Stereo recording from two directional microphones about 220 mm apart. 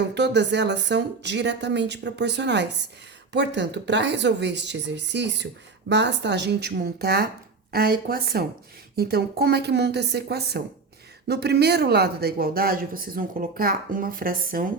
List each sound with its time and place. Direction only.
0.1 s speech: 50° right (ahead or behind)